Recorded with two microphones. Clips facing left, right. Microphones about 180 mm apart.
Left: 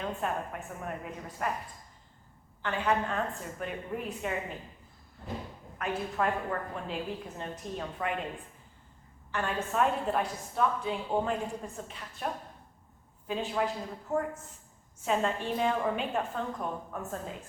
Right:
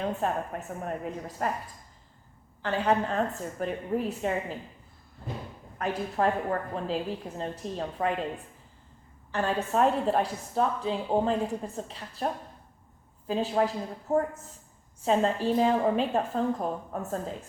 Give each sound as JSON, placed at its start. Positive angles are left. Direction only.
{"t": 0.0, "sound": "a woman's voice", "side_deg": -35}
{"t": 2.6, "sound": "a woman's voice", "side_deg": -35}
{"t": 5.8, "sound": "a woman's voice", "side_deg": -35}
{"t": 9.3, "sound": "a woman's voice", "side_deg": -35}
{"t": 15.0, "sound": "a woman's voice", "side_deg": -35}